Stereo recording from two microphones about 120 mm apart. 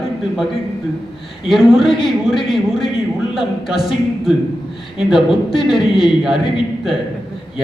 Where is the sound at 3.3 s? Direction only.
5° right (ahead or behind).